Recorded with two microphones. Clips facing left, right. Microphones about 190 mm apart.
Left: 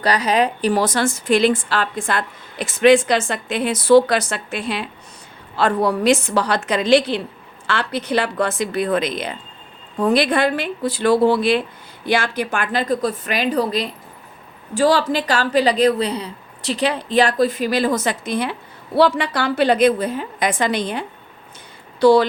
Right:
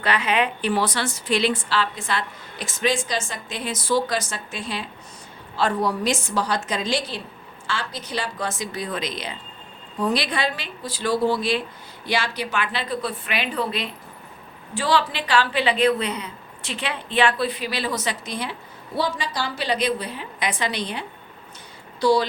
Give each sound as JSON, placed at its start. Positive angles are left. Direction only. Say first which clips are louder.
{"t": 0.0, "sound": "a woman's voice", "louder": "left 5 dB", "side_deg": 40}
{"t": 18.9, "sound": "a woman's voice", "louder": "left 9 dB", "side_deg": 65}
{"t": 22.0, "sound": "a woman's voice", "louder": "left 7 dB", "side_deg": 55}